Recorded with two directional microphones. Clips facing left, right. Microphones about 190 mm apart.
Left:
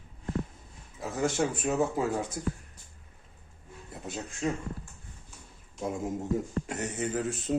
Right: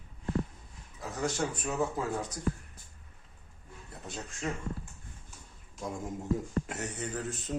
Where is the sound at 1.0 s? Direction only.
25° left (ahead or behind).